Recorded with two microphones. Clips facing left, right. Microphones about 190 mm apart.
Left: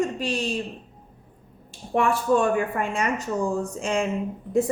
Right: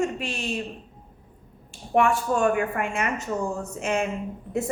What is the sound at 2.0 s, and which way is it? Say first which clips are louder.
A woman's voice: even; 35° left (ahead or behind).